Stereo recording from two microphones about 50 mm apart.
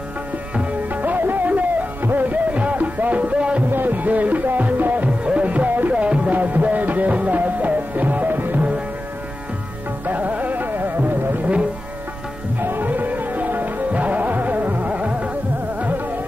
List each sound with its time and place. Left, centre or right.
0.8 s music: right
3.7 s music: right
5.9 s music: right
8.5 s music: right
10.0 s music: right
12.5 s music: right